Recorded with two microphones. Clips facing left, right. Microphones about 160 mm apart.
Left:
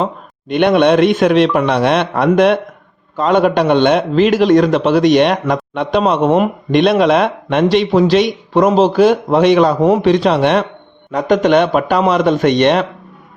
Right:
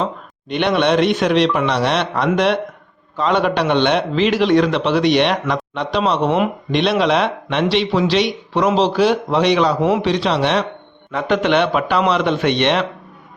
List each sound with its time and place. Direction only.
0.0 s a man's voice: 50° left (ahead or behind)